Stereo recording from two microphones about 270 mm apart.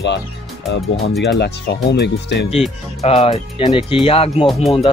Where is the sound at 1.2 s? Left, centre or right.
Left.